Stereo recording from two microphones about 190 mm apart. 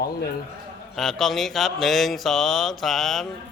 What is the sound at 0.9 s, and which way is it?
Mantra, centre (ahead or behind).